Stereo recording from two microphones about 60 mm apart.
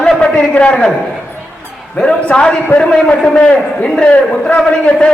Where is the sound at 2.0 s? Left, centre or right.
Centre.